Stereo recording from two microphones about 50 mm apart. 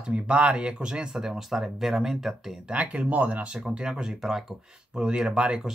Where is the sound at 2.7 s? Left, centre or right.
Right.